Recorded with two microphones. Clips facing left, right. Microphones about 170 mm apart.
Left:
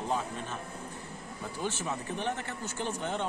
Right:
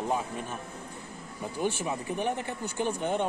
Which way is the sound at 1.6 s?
15° right (ahead or behind).